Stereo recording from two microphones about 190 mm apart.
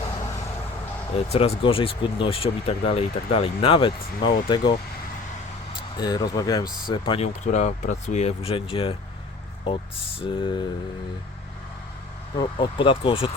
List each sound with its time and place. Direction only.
1.1 s speech: 30° left (ahead or behind)
5.7 s speech: 20° left (ahead or behind)
10.2 s speech: 25° left (ahead or behind)
12.4 s speech: 25° left (ahead or behind)